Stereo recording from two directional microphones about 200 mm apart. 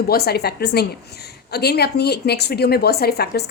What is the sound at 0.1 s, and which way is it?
A woman's voice, 50° left (ahead or behind).